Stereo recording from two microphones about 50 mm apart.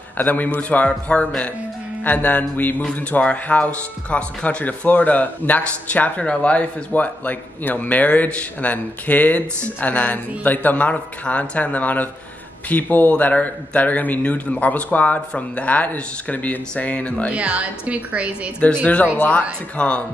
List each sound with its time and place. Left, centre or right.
0.2 s speech: left
2.0 s speech: left
2.8 s speech: left
17.3 s a woman's voice: right
19.1 s speech: left